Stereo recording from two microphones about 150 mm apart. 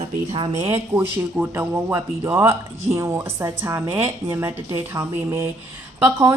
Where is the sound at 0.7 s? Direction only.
15° right (ahead or behind).